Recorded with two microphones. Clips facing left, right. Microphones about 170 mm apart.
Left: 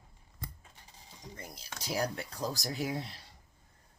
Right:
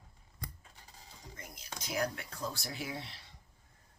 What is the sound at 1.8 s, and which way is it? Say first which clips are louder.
Speech: left 2 dB; 35° left (ahead or behind).